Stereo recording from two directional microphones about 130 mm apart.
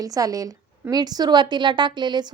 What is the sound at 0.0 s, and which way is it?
A woman's voice, 25° right (ahead or behind).